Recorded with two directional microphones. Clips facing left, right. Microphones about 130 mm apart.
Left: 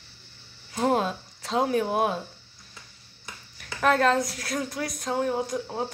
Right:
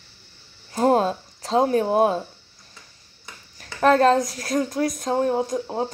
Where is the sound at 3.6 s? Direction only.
35° right (ahead or behind).